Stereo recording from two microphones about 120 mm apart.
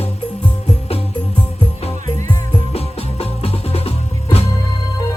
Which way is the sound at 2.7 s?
60° left (ahead or behind).